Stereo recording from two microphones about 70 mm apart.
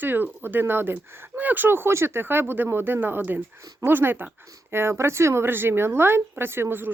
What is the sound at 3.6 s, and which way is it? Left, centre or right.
Speech, right.